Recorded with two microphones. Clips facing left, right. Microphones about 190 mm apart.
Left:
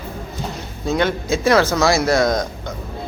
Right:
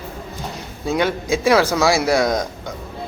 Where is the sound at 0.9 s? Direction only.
10° right (ahead or behind).